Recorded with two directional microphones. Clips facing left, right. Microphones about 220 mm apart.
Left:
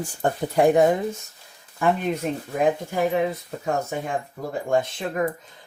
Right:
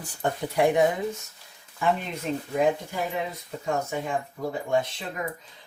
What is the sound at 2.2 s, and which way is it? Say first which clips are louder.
Speech: left 2 dB; 55° left (ahead or behind).